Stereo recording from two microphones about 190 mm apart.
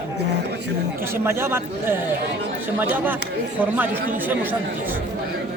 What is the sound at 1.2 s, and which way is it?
Speech, 10° right (ahead or behind).